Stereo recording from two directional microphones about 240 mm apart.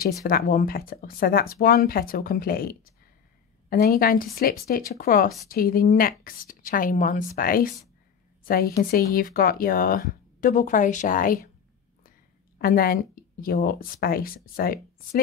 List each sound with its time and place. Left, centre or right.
0.0 s speech: left
12.5 s speech: left